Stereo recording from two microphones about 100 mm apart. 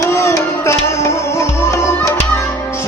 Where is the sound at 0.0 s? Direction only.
30° left (ahead or behind).